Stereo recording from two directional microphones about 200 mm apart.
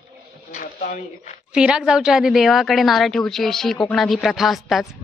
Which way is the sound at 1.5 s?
5° right (ahead or behind).